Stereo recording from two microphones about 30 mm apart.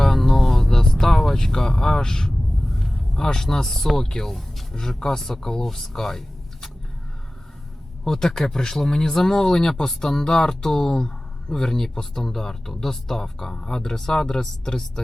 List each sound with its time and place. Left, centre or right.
0.0 s vehicle: centre
1.2 s a sound: centre
2.0 s vehicle: centre
2.6 s a sound: centre
3.4 s speech: centre
4.7 s speech: centre
8.0 s speech: centre